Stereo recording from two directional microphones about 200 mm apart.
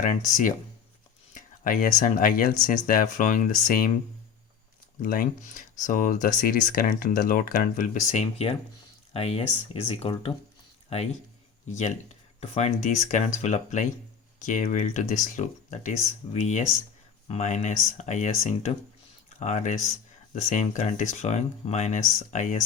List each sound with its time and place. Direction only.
0.0 s speech: 40° left (ahead or behind)
5.0 s speech: 45° left (ahead or behind)